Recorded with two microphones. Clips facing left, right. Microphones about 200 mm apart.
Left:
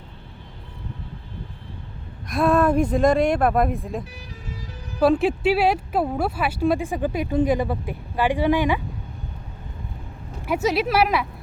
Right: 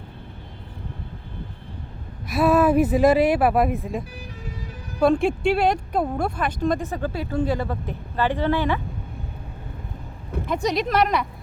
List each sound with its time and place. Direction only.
2.3 s speech: 5° right (ahead or behind); by 8.8 s 15° left (ahead or behind)
10.4 s speech: 5° left (ahead or behind)